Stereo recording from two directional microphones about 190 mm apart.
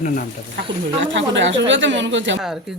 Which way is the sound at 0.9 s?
75° right (ahead or behind).